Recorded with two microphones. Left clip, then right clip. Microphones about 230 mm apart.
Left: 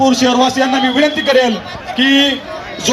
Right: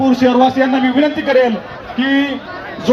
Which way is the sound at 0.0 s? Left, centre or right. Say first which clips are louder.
Even; left.